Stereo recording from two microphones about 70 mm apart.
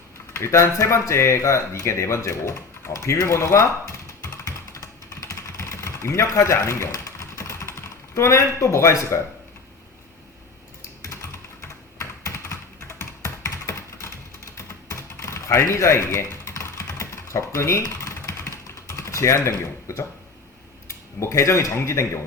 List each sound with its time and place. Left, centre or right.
0.3 s speech: left
11.0 s computer keyboard: left
14.8 s typing: left
20.8 s speech: left